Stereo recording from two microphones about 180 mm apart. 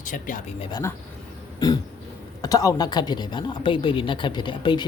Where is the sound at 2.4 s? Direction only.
20° left (ahead or behind).